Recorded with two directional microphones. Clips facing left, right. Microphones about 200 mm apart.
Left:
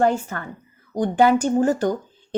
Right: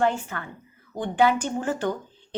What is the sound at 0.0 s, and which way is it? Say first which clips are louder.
A woman's voice: left 4 dB; 40° left (ahead or behind).